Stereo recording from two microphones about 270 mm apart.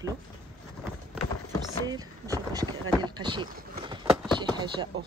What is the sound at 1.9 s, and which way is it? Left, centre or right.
Speech, centre.